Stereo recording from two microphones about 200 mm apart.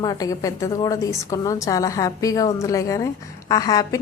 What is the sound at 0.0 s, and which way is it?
A woman's voice, 20° left (ahead or behind).